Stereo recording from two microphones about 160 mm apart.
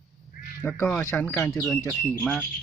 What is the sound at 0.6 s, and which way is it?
Speech, 15° left (ahead or behind).